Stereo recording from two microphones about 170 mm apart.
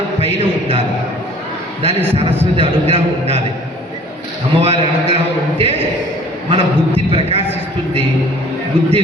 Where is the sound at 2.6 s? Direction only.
35° right (ahead or behind).